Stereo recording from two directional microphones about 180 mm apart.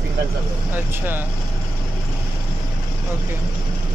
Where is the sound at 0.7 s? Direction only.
10° right (ahead or behind).